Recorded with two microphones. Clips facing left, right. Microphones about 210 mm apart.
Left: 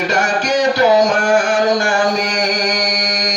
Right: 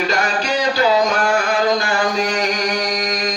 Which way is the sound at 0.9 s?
75° left (ahead or behind).